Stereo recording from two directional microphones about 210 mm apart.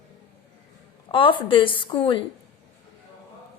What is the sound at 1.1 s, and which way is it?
A woman's voice, 25° left (ahead or behind).